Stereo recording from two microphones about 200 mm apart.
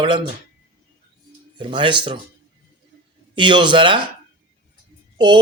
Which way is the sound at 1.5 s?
25° right (ahead or behind).